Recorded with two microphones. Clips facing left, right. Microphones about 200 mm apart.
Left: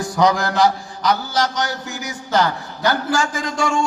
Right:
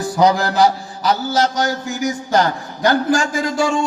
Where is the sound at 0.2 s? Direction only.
30° right (ahead or behind).